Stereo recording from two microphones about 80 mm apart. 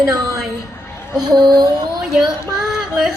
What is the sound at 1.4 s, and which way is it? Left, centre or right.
Music, right.